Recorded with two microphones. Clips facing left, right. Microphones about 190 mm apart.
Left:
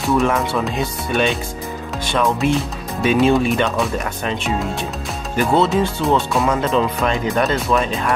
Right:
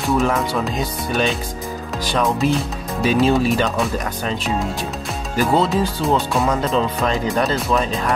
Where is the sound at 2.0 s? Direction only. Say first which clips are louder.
Left 1 dB; 35° right (ahead or behind).